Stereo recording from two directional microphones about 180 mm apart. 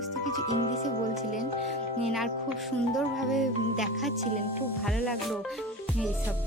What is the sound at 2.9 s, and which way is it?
Speech, centre (ahead or behind).